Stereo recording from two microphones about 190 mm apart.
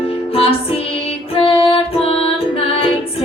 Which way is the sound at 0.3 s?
30° left (ahead or behind).